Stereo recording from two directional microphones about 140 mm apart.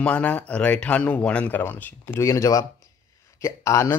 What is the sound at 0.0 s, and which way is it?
Speech, 10° left (ahead or behind).